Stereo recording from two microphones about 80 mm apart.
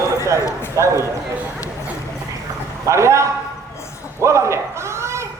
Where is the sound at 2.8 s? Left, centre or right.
Right.